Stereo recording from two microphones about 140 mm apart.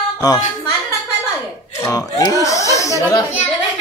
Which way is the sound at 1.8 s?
25° left (ahead or behind).